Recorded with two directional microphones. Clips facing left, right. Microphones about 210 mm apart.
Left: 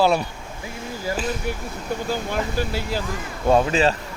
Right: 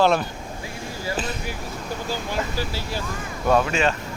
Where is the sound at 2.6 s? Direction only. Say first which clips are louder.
Left 4 dB; 55° left (ahead or behind).